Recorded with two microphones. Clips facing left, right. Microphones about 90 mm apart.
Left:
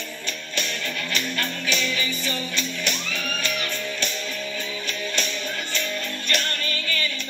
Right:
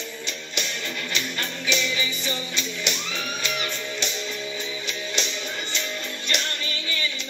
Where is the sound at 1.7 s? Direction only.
20° right (ahead or behind).